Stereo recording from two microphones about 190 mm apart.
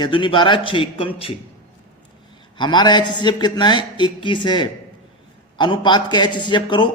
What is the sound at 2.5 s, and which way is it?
A man's voice, 25° left (ahead or behind).